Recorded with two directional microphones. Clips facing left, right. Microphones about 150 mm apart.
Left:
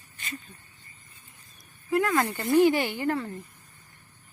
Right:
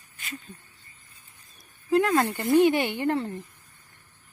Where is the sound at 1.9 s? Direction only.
25° right (ahead or behind).